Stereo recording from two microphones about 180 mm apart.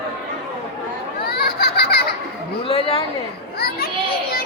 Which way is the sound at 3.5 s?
60° left (ahead or behind).